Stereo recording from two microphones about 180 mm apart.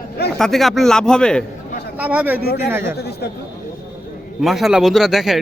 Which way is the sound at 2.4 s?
60° left (ahead or behind).